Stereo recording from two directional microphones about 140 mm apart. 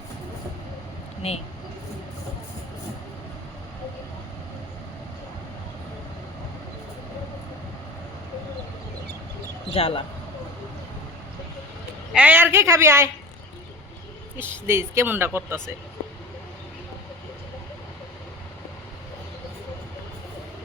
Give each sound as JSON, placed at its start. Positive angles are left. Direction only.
{"t": 1.2, "sound": "speech", "side_deg": 45}
{"t": 9.7, "sound": "speech", "side_deg": 40}
{"t": 12.1, "sound": "speech", "side_deg": -10}
{"t": 14.3, "sound": "speech", "side_deg": -15}